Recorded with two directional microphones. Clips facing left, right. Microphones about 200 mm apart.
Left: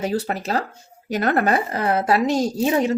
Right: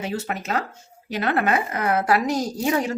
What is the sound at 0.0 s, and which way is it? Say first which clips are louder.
A woman's voice: left 4 dB; 35° left (ahead or behind).